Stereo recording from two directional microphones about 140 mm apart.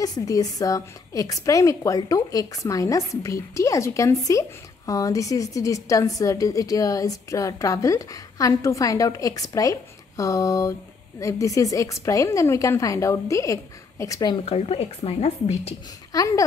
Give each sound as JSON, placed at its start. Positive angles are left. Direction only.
{"t": 0.0, "sound": "a woman's voice", "side_deg": 25}
{"t": 14.4, "sound": "speech", "side_deg": 45}
{"t": 16.1, "sound": "a woman's voice", "side_deg": 25}